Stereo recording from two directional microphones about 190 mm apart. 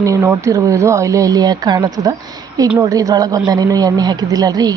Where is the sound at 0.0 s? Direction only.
15° right (ahead or behind).